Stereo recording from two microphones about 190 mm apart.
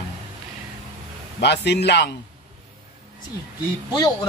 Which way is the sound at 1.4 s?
65° left (ahead or behind).